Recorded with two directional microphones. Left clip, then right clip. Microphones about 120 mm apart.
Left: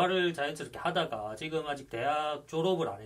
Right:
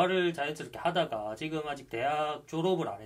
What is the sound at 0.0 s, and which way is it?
Speech, 35° right (ahead or behind).